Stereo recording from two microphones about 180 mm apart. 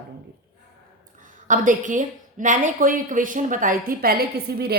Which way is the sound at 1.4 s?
45° right (ahead or behind).